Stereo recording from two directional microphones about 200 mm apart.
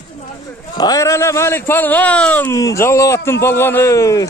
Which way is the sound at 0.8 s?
15° left (ahead or behind).